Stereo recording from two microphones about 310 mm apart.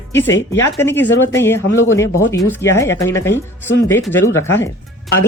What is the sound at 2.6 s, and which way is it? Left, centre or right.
Speech, centre.